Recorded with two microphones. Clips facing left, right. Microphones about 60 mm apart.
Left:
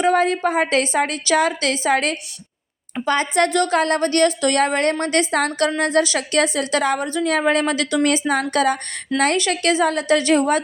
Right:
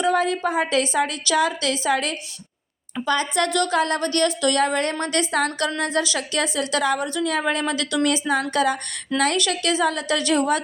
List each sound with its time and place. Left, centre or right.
0.0 s a woman's voice: left